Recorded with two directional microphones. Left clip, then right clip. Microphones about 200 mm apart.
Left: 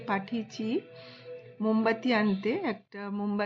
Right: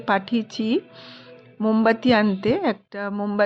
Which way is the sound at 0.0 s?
45° right (ahead or behind).